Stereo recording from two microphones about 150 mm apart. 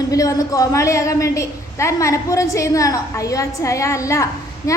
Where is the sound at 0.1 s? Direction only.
25° left (ahead or behind).